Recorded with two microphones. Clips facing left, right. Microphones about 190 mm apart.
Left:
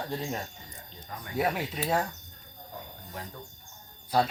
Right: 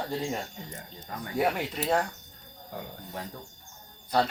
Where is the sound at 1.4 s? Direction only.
Centre (ahead or behind).